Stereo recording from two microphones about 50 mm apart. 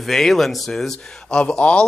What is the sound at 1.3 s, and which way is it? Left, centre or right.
Speech, centre.